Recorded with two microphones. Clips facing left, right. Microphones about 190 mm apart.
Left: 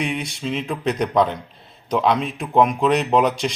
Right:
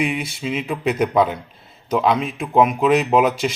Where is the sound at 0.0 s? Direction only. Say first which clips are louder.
Right 2 dB; 5° right (ahead or behind).